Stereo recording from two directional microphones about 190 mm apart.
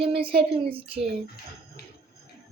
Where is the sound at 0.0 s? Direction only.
30° right (ahead or behind).